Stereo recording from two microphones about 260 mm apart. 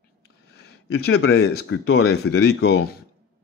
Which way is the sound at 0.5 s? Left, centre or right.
Left.